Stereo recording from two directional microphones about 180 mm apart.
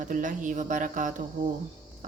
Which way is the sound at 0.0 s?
45° right (ahead or behind).